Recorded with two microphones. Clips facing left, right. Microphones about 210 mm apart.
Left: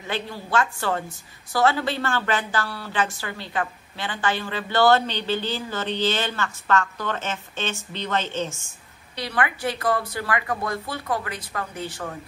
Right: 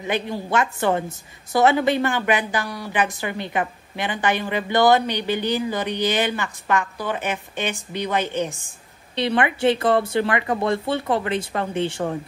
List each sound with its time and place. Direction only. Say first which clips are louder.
0.0 s a woman's voice: right 5 dB; 20° right (ahead or behind)